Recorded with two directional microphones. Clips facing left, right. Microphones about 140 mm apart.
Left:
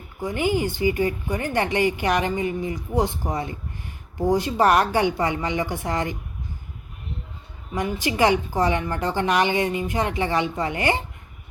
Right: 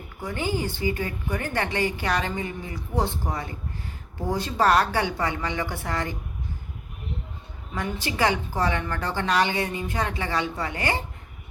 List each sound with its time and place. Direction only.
0.2 s a woman's voice: 15° left (ahead or behind)
7.7 s a woman's voice: 15° left (ahead or behind)